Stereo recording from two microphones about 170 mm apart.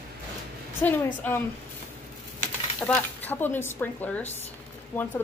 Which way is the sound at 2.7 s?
10° left (ahead or behind).